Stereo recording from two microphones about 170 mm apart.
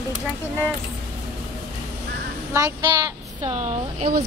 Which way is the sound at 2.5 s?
15° right (ahead or behind).